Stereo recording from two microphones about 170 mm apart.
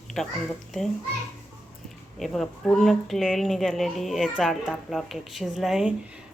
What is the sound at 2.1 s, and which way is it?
Speech, centre (ahead or behind).